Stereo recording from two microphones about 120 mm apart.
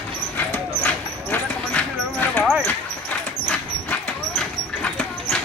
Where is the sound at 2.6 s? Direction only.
15° left (ahead or behind).